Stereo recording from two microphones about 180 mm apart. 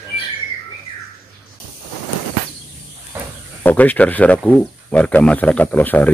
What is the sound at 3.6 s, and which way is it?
Speech, 10° left (ahead or behind).